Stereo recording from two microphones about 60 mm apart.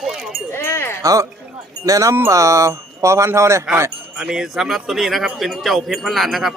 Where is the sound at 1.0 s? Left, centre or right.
Right.